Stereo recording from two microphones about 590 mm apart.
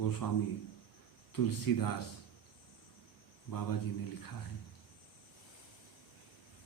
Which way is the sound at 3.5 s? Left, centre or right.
Left.